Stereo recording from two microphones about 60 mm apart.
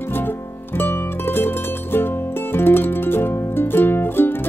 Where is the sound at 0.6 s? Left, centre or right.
Left.